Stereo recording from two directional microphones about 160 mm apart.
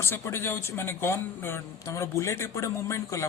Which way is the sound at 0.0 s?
15° left (ahead or behind).